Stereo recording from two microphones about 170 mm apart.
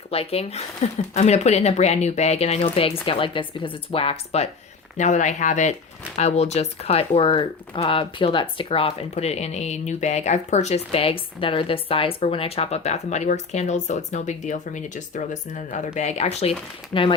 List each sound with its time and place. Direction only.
0.1 s speech: 35° left (ahead or behind)